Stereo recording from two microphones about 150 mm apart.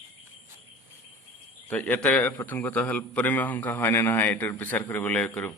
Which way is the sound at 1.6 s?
10° left (ahead or behind).